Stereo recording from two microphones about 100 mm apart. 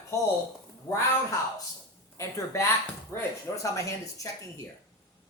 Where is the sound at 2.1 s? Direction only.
30° left (ahead or behind).